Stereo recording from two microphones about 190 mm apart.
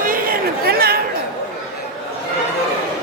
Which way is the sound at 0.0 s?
50° right (ahead or behind).